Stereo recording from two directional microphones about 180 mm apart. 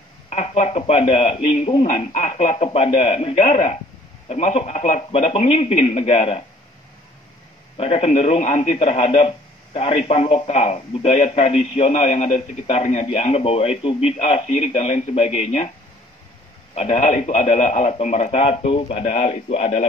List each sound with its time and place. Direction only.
0.3 s speech: 35° left (ahead or behind)
7.7 s speech: 35° left (ahead or behind)
16.7 s speech: 35° left (ahead or behind)